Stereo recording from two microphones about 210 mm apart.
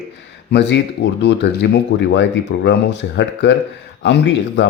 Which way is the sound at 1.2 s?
55° left (ahead or behind).